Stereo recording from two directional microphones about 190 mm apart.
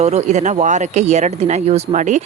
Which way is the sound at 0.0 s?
35° right (ahead or behind).